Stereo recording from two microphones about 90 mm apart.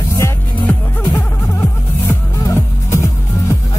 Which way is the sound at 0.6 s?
25° left (ahead or behind).